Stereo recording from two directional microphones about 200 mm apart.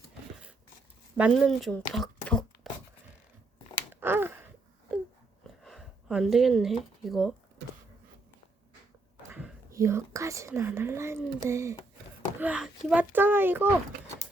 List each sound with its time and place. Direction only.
1.1 s speech: 5° right (ahead or behind)
4.0 s a sound: 10° right (ahead or behind)
5.6 s speech: centre (ahead or behind)
9.3 s speech: 10° right (ahead or behind)